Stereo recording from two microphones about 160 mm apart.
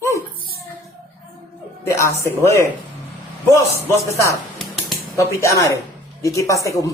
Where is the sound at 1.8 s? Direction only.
15° left (ahead or behind).